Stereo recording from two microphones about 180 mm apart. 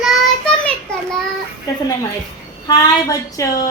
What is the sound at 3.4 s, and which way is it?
Speech, 20° left (ahead or behind).